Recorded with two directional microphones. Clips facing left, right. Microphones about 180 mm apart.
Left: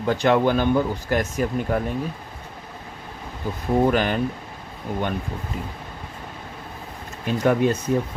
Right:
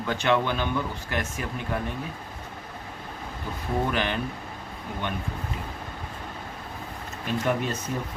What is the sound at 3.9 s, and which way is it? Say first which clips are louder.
Speech: left 6 dB; 45° left (ahead or behind).